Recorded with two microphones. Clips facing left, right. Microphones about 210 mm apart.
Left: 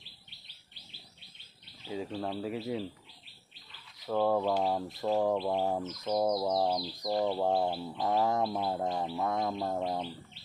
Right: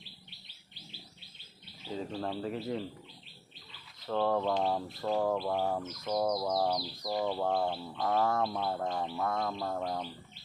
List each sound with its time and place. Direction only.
1.9 s speech: 5° left (ahead or behind)
4.0 s bird: 10° left (ahead or behind)
5.4 s bird: 15° left (ahead or behind)